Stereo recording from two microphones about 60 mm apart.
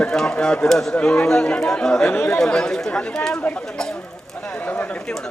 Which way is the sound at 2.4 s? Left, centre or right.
Centre.